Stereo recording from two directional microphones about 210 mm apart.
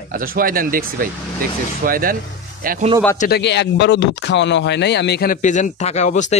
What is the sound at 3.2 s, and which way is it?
Speech, 50° left (ahead or behind).